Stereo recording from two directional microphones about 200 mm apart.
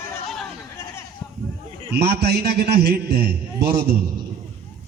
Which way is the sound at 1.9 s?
55° right (ahead or behind).